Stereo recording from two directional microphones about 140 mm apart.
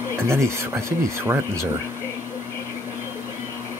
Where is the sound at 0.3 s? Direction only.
20° right (ahead or behind).